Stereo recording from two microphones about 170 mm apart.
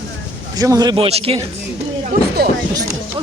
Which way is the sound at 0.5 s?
20° right (ahead or behind).